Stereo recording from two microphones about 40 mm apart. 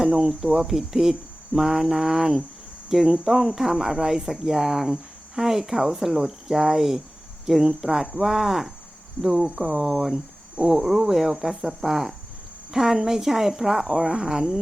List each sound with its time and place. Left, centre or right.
0.1 s speech: right
0.6 s speech: centre
9.3 s speech: right